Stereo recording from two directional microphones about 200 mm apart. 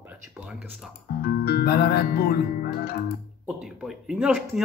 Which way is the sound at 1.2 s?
50° left (ahead or behind).